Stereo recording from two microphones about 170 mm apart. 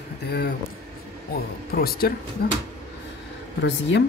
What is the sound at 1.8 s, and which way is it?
Speech, 60° left (ahead or behind).